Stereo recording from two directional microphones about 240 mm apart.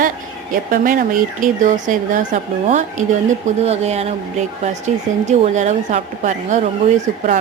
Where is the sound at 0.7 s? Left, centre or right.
Right.